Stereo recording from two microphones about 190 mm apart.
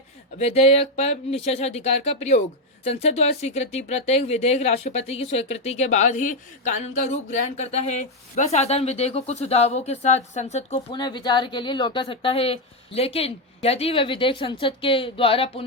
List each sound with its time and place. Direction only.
0.3 s speech: 35° left (ahead or behind)
10.9 s speech: 25° left (ahead or behind)